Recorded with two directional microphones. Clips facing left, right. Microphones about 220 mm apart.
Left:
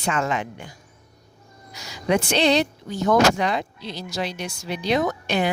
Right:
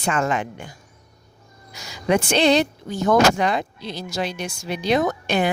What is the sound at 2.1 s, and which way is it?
Speech, 50° right (ahead or behind).